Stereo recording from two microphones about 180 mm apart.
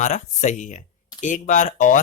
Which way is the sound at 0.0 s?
40° left (ahead or behind).